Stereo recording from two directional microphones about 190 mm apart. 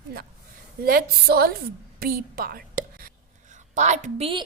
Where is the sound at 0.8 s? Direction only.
55° right (ahead or behind).